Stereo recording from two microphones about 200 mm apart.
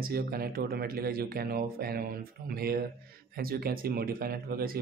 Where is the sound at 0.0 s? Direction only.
50° right (ahead or behind).